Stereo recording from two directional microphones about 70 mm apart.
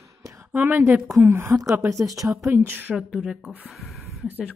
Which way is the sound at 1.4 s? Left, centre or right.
Right.